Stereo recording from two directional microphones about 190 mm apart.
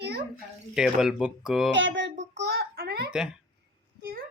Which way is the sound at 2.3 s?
60° right (ahead or behind).